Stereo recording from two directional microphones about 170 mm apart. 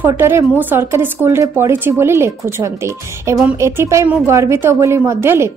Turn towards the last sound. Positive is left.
turn(degrees=-15)  # may be behind; listen again after turning